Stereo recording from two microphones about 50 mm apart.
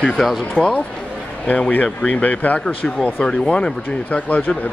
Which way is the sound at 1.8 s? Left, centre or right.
Centre.